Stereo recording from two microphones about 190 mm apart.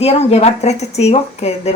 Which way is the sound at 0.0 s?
35° left (ahead or behind).